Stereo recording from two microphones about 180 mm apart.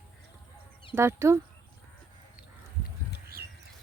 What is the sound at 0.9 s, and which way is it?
Speech, 15° right (ahead or behind).